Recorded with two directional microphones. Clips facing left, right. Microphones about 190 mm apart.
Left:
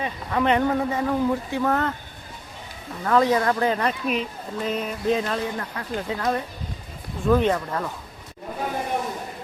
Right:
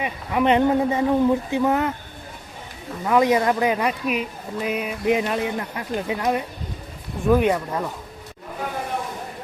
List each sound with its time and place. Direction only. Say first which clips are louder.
0.0 s speech: right 2 dB; 15° right (ahead or behind)
3.0 s speech: right 2 dB; 15° right (ahead or behind)